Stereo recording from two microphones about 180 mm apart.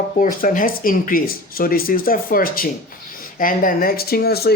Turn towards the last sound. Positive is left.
turn(degrees=60)  # may be behind; listen again after turning